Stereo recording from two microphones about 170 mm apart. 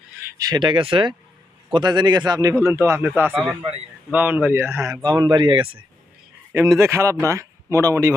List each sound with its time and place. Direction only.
0.3 s speech: 20° right (ahead or behind)
6.5 s speech: 15° right (ahead or behind)